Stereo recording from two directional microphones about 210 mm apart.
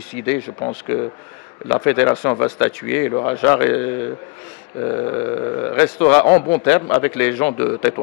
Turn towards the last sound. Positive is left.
turn(degrees=10)  # may be behind; listen again after turning